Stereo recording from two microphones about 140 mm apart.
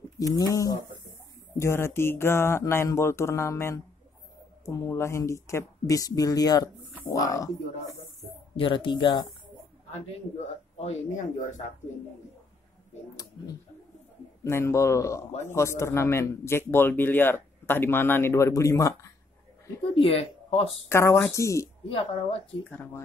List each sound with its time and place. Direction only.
0.2 s speech: 25° left (ahead or behind)
8.5 s a woman's voice: 35° left (ahead or behind)
10.8 s speech: 55° left (ahead or behind)
13.1 s a sound: 25° left (ahead or behind)
14.4 s speech: 20° left (ahead or behind)
20.0 s speech: 45° left (ahead or behind)
20.9 s speech: 20° left (ahead or behind)
21.8 s a woman's voice: 40° left (ahead or behind)